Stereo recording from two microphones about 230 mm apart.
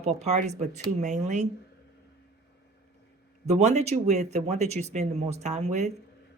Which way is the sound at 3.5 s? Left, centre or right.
Right.